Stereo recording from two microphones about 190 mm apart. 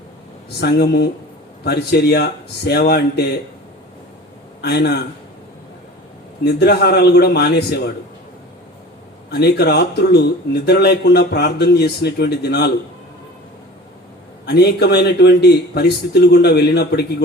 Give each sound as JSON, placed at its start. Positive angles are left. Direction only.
{"t": 0.6, "sound": "speech", "side_deg": 60}
{"t": 4.6, "sound": "speech", "side_deg": 60}
{"t": 6.4, "sound": "speech", "side_deg": 55}
{"t": 9.3, "sound": "speech", "side_deg": 60}
{"t": 14.4, "sound": "speech", "side_deg": 60}